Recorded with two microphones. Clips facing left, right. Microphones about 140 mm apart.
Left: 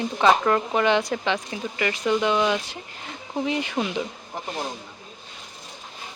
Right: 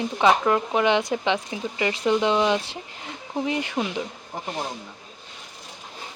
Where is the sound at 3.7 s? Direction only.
Centre (ahead or behind).